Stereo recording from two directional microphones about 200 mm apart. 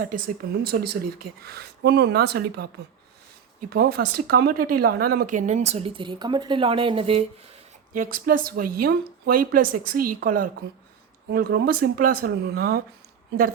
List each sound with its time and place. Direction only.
0.0 s speech: 45° right (ahead or behind)
3.7 s speech: 50° right (ahead or behind); by 7.3 s 30° right (ahead or behind)
7.9 s speech: 40° right (ahead or behind)